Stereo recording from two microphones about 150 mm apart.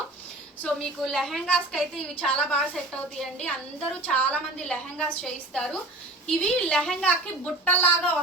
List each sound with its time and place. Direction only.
0.6 s a woman's voice: centre (ahead or behind)